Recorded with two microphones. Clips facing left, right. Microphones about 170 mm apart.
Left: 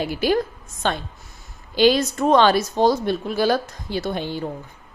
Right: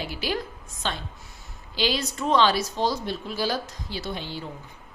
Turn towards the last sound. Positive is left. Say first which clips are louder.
# left 8 dB
turn(degrees=50)  # may be behind; listen again after turning